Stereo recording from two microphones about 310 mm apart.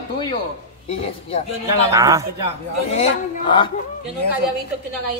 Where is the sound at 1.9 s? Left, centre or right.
Centre.